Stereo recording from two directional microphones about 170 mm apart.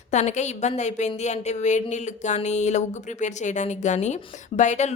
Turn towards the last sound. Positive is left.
turn(degrees=45)  # may be behind; listen again after turning